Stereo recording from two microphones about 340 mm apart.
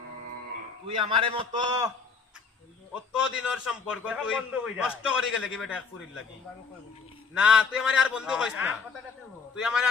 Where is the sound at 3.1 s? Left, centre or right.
Centre.